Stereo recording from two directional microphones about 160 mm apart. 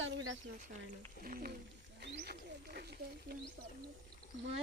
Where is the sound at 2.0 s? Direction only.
85° right.